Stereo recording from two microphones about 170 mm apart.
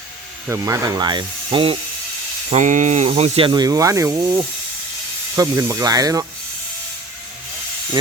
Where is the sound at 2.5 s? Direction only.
45° right (ahead or behind); by 6.3 s 20° right (ahead or behind).